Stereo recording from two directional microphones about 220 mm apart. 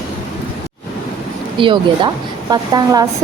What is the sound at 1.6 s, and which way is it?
A woman's voice, 20° right (ahead or behind).